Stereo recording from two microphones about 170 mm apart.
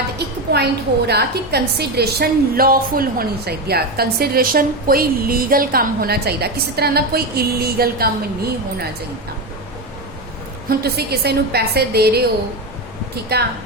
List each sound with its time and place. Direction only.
0.5 s a woman's voice: 70° right (ahead or behind)
10.7 s a woman's voice: 70° right (ahead or behind)
13.3 s a woman's voice: 70° right (ahead or behind)